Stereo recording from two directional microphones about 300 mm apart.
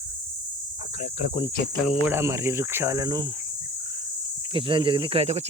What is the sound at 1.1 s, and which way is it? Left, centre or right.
Speech, centre.